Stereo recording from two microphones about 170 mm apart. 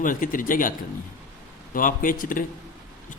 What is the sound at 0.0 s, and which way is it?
Speech, 50° left (ahead or behind).